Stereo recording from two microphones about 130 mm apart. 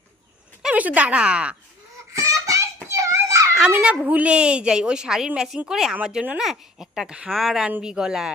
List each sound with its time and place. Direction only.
0.6 s speech: 10° right (ahead or behind)
2.1 s a sound: 25° right (ahead or behind)
3.7 s a woman's voice: 10° right (ahead or behind)